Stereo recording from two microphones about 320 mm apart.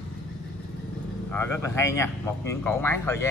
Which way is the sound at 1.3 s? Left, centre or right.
Centre.